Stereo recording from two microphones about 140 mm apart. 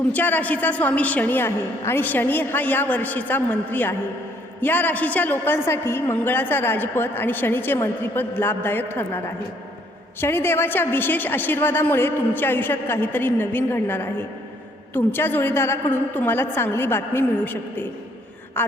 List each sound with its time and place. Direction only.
0.1 s a woman's voice: 10° left (ahead or behind)